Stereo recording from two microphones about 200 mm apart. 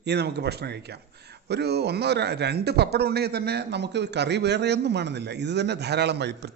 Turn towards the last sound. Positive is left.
turn(degrees=-55)  # may be behind; listen again after turning